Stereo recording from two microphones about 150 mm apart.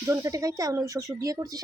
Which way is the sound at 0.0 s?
20° right (ahead or behind).